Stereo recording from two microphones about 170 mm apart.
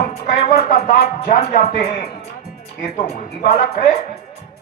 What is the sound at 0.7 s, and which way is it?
Speech, 45° left (ahead or behind).